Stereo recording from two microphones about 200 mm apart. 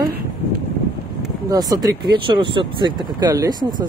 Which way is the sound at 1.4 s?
20° right (ahead or behind).